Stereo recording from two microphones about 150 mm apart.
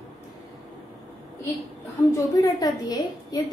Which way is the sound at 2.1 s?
25° left (ahead or behind).